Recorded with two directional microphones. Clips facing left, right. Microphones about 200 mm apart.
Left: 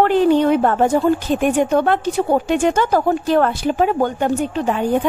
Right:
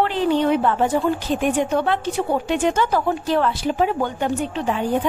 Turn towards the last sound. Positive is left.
turn(degrees=50)  # may be behind; listen again after turning